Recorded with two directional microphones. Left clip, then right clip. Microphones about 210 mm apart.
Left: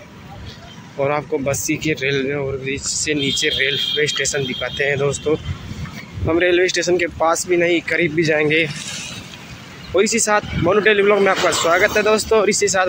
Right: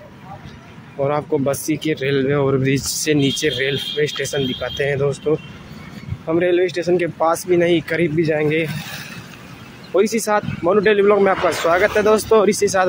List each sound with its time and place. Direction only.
0.9 s speech: 10° right (ahead or behind)
9.9 s speech: 15° right (ahead or behind)